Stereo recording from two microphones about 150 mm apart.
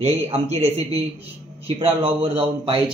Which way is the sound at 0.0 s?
45° right (ahead or behind).